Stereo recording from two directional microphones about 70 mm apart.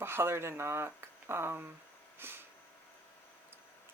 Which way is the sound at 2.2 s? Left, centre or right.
Right.